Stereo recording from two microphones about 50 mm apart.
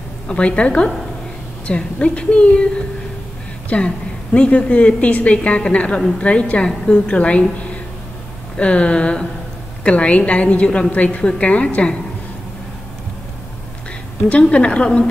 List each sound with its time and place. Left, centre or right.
0.3 s a woman's voice: left
8.5 s a woman's voice: left
14.4 s a woman's voice: left